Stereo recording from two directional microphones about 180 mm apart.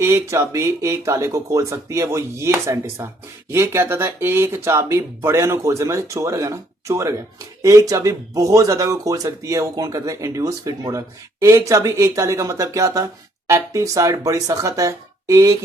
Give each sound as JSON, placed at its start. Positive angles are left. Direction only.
{"t": 0.0, "sound": "speech", "side_deg": -15}